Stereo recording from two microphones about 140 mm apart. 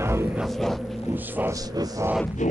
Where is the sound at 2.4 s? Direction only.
60° left (ahead or behind).